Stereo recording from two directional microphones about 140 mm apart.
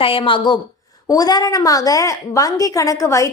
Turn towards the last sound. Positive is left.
turn(degrees=20)  # may be behind; listen again after turning